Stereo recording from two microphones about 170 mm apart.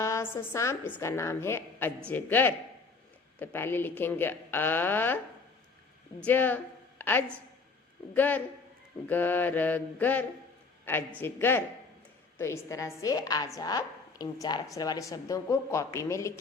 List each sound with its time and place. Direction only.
0.0 s a woman's voice: 15° left (ahead or behind)
6.2 s a woman's voice: 10° left (ahead or behind)